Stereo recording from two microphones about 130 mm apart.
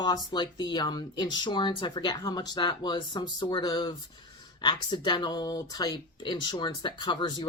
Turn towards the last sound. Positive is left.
turn(degrees=35)  # may be behind; listen again after turning